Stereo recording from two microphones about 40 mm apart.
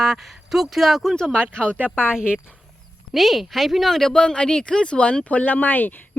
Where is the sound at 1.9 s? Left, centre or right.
Right.